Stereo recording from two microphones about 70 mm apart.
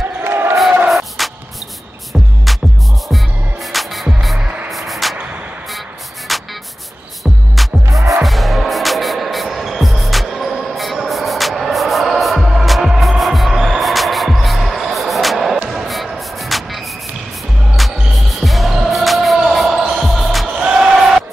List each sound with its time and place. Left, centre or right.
0.2 s crowd: right
0.8 s music: centre
2.5 s music: centre
3.7 s music: centre
6.3 s music: centre
7.6 s music: centre
20.4 s a sound: centre